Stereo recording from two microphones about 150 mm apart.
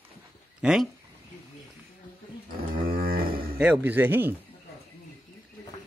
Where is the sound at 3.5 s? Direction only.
10° right (ahead or behind).